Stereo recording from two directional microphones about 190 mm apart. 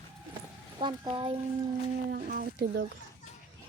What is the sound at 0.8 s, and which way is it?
Speech, 25° right (ahead or behind).